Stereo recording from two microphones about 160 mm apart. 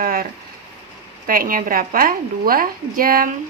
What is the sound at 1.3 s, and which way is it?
A woman's voice, 60° right (ahead or behind).